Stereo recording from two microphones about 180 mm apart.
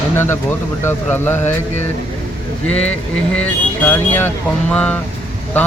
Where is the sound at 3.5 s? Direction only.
10° left (ahead or behind).